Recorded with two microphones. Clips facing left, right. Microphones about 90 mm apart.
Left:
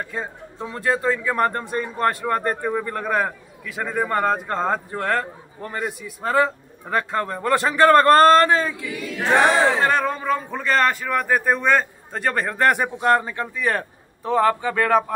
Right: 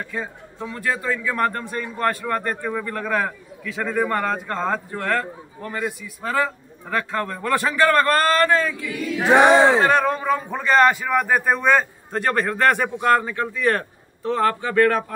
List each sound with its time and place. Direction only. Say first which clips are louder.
0.1 s a man's voice: even; 25° left (ahead or behind); by 4.2 s 5° left (ahead or behind)
4.3 s a man's voice: left 2 dB; 15° left (ahead or behind)
9.1 s choir: right 4 dB; 10° right (ahead or behind)
9.8 s a man's voice: right 2 dB; 5° right (ahead or behind)
13.0 s speech: right 1 dB; 20° left (ahead or behind)